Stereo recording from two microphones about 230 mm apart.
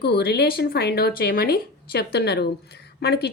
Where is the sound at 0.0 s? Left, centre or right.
Left.